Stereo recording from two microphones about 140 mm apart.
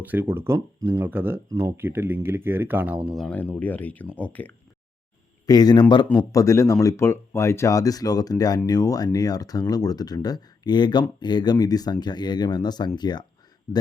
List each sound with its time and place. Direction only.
0.0 s speech: 15° right (ahead or behind)
3.1 s speech: centre (ahead or behind)
3.3 s speech: 10° left (ahead or behind)
5.5 s speech: 30° left (ahead or behind)
13.7 s speech: 15° left (ahead or behind)